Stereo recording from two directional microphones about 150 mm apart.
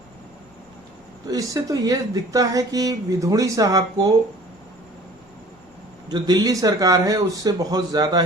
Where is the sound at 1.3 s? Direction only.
25° right (ahead or behind).